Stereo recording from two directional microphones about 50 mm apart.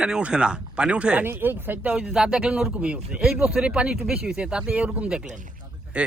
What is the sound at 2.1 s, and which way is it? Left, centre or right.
A man's voice, centre.